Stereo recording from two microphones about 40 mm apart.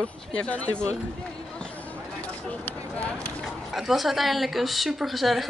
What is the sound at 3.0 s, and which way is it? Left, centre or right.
Speech, left.